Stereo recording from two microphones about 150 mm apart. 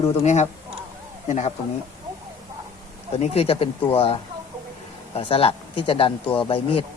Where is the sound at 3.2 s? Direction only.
40° left (ahead or behind).